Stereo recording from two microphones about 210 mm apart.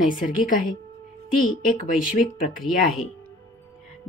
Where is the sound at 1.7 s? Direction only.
40° left (ahead or behind).